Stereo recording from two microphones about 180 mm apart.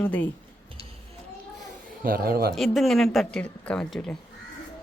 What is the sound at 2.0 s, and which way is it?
Speech, 55° right (ahead or behind).